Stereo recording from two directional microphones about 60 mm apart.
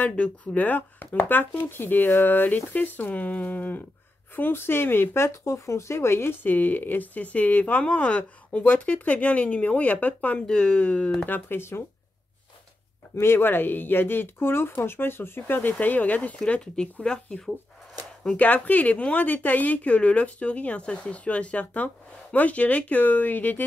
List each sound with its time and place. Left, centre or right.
0.0 s speech: left
6.4 s speech: left
10.4 s speech: centre
11.2 s speech: left
13.1 s speech: left; by 16.9 s centre
18.3 s speech: left